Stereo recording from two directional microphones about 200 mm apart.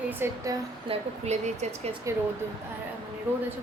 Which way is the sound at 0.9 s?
35° right (ahead or behind).